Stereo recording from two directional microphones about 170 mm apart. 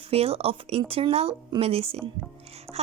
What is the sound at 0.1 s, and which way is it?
Speech, 35° right (ahead or behind).